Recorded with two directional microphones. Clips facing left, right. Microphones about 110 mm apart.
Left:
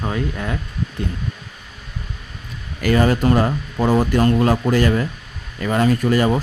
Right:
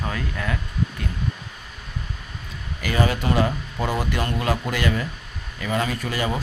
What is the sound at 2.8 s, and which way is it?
Speech, 45° left (ahead or behind).